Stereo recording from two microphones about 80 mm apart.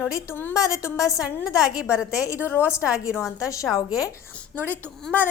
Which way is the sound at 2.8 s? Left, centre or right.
Centre.